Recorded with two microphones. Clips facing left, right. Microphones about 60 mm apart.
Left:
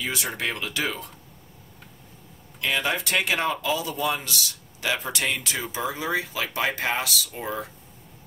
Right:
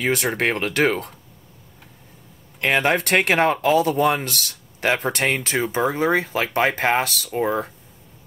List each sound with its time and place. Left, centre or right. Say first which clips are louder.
0.0 s speech: right 8 dB; right
2.6 s speech: right 7 dB; right